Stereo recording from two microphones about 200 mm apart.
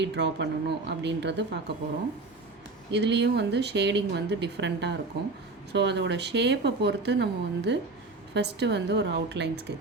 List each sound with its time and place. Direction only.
0.0 s a woman's voice: 60° right (ahead or behind)
2.9 s a woman's voice: 60° right (ahead or behind)